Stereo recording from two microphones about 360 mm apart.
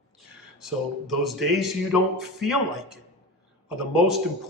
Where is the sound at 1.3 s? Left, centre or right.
Centre.